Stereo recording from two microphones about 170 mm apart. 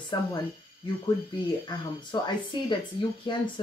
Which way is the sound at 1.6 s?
25° left (ahead or behind).